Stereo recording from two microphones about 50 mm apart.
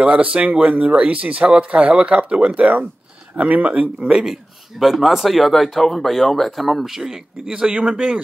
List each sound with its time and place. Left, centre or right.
0.0 s speech: right